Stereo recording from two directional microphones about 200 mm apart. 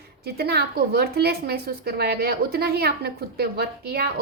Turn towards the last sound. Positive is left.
turn(degrees=-50)  # may be behind; listen again after turning